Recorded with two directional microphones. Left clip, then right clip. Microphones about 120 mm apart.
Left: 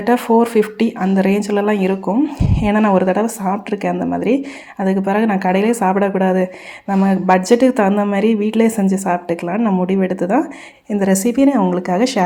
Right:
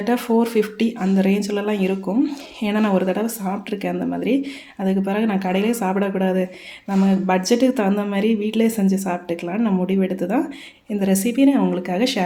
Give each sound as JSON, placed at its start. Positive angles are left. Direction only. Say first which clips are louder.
{"t": 0.0, "sound": "a woman's voice", "louder": "left 6 dB", "side_deg": 25}